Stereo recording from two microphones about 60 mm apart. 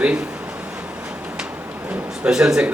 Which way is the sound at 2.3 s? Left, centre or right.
Centre.